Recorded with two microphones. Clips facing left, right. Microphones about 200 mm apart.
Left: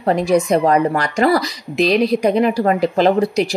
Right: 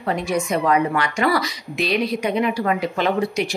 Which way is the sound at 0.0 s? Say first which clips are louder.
Left 7 dB; 35° left (ahead or behind).